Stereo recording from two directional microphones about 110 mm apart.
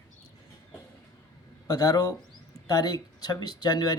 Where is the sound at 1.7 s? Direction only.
35° left (ahead or behind).